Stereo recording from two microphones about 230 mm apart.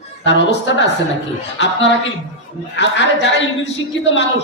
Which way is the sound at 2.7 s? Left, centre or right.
Left.